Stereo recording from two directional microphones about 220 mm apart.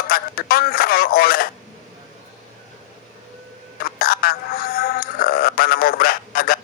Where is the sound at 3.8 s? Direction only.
40° left (ahead or behind).